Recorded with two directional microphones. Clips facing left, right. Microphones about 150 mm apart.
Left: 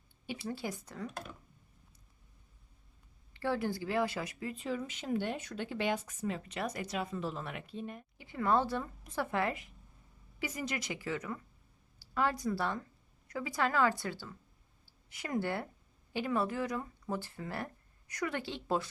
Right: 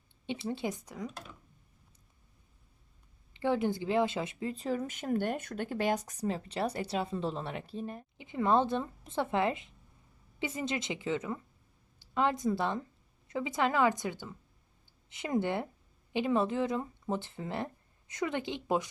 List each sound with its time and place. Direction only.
0.3 s a woman's voice: 25° right (ahead or behind)
3.3 s speech: 20° right (ahead or behind); by 8.0 s 35° right (ahead or behind)
8.2 s a woman's voice: 20° right (ahead or behind)